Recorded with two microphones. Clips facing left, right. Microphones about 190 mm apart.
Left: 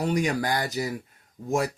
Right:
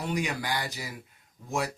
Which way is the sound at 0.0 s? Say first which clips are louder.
Left 6 dB; 40° left (ahead or behind).